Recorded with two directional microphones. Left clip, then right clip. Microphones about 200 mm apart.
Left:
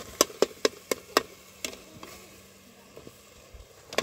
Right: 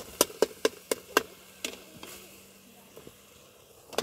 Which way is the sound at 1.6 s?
45° left (ahead or behind).